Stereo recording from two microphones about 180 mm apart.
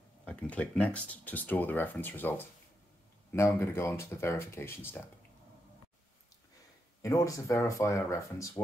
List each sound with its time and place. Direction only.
0.2 s speech: 5° left (ahead or behind)
7.0 s speech: 20° left (ahead or behind)